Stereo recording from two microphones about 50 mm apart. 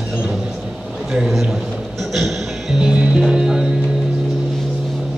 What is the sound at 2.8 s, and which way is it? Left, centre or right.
Speech, centre.